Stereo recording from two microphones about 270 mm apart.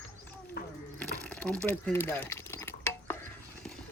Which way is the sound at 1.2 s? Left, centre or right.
Centre.